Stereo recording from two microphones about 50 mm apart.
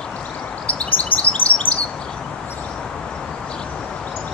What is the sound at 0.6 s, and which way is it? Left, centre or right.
Chirp, left.